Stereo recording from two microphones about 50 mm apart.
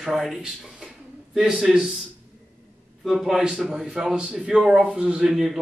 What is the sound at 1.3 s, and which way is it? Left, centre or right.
Speech, centre.